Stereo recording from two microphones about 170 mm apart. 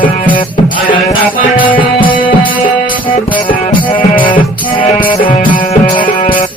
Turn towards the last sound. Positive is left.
turn(degrees=30)  # may be behind; listen again after turning